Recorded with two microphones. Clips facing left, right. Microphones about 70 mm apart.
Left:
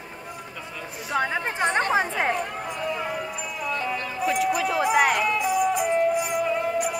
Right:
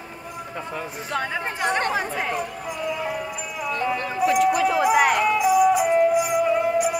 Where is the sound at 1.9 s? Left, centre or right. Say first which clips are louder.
Left 2 dB; left.